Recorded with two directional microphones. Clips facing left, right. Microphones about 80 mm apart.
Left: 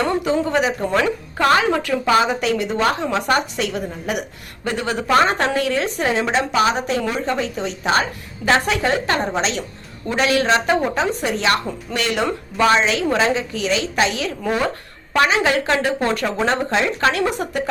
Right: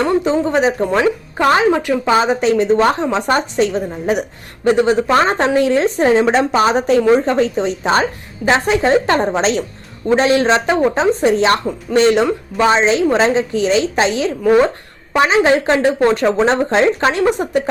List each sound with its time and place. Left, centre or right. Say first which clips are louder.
0.3 s a woman's voice: right 4 dB; right